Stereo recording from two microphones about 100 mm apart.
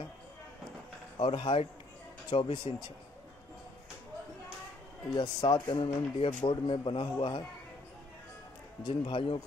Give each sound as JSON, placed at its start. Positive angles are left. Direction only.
{"t": 1.1, "sound": "speech", "side_deg": 55}
{"t": 5.1, "sound": "speech", "side_deg": 45}
{"t": 8.8, "sound": "speech", "side_deg": 60}